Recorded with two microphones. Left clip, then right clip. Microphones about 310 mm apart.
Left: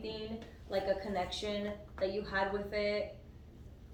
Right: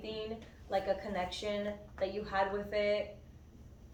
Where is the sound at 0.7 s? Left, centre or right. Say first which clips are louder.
Even; centre.